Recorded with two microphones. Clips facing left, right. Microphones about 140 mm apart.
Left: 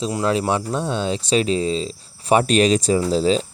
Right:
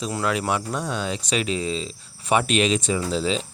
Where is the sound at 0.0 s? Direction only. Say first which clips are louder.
Left 4 dB; 25° left (ahead or behind).